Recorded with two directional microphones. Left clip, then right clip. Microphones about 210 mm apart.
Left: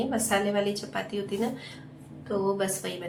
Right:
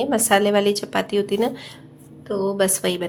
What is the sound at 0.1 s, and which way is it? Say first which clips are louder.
A woman's voice: right 12 dB; 50° right (ahead or behind).